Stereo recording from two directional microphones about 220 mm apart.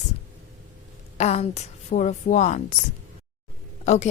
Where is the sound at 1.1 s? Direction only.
30° left (ahead or behind).